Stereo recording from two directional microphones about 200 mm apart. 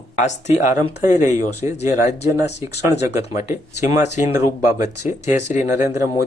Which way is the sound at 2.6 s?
15° right (ahead or behind).